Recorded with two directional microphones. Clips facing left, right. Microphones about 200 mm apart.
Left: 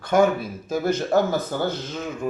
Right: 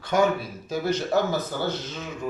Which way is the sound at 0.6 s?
50° left (ahead or behind).